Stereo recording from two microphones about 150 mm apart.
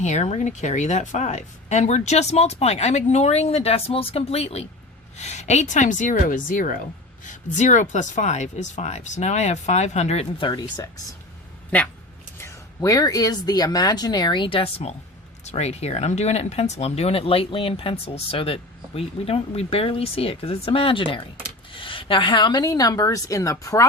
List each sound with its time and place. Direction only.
0.0 s a woman's voice: 50° left (ahead or behind); by 10.8 s 30° left (ahead or behind)
11.7 s speech: 10° left (ahead or behind)